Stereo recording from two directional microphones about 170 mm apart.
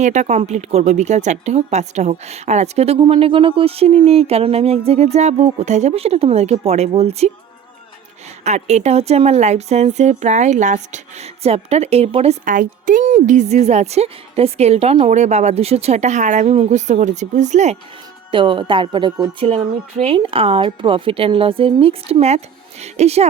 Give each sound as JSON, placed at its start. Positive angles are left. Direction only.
{"t": 0.0, "sound": "a woman's voice", "side_deg": -45}
{"t": 8.4, "sound": "a woman's voice", "side_deg": -40}
{"t": 12.5, "sound": "a woman's voice", "side_deg": -50}
{"t": 18.3, "sound": "a woman's voice", "side_deg": -30}